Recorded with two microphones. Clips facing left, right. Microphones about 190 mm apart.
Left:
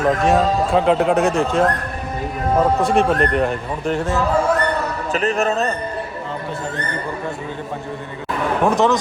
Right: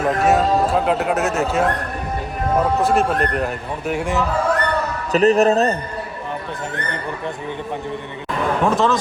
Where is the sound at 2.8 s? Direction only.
Centre (ahead or behind).